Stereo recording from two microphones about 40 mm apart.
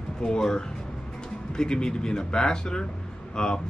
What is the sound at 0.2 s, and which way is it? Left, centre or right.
Speech, centre.